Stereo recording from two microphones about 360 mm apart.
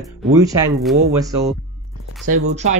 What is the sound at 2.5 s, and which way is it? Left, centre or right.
Speech, centre.